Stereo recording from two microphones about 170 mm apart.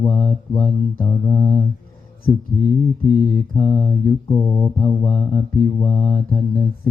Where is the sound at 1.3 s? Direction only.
10° left (ahead or behind).